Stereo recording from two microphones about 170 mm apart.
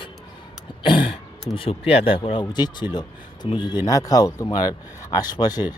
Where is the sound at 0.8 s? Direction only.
30° left (ahead or behind).